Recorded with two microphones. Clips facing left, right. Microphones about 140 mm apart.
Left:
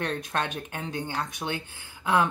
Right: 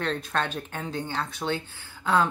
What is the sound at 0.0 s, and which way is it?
Speech, 15° left (ahead or behind).